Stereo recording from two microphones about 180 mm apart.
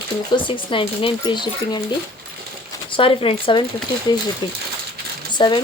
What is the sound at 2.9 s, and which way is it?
Speech, 30° left (ahead or behind).